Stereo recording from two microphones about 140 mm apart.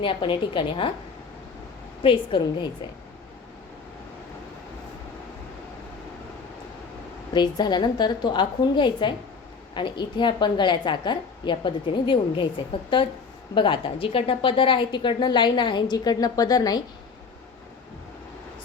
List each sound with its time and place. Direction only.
0.0 s a woman's voice: 35° left (ahead or behind)
2.0 s a woman's voice: 35° left (ahead or behind)
7.3 s a woman's voice: 30° left (ahead or behind)